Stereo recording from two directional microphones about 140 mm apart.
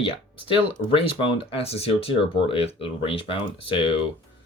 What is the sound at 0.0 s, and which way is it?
Speech, 40° left (ahead or behind).